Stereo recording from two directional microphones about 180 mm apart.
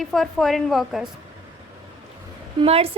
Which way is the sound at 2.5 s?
35° right (ahead or behind).